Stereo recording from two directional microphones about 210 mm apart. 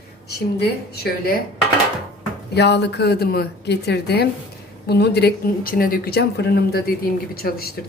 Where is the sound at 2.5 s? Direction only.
55° left (ahead or behind).